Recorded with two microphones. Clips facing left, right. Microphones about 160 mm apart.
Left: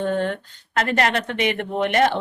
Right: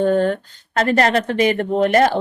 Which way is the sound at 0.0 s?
40° right (ahead or behind).